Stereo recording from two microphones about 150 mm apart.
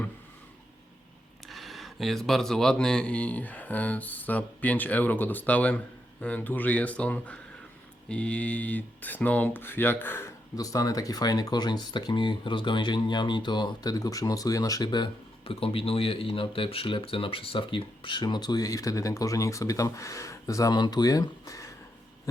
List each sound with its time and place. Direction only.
1.5 s speech: centre (ahead or behind); by 21.7 s 20° left (ahead or behind)